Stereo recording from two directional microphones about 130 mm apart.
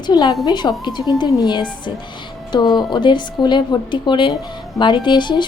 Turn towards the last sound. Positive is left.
turn(degrees=35)  # may be behind; listen again after turning